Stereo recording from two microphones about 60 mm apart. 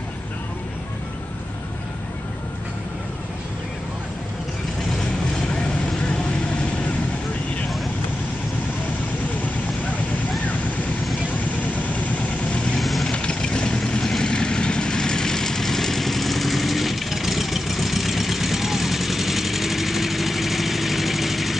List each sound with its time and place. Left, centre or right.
5.5 s vehicle: centre
11.3 s vehicle: left
12.7 s vehicle: centre
13.1 s vehicle: centre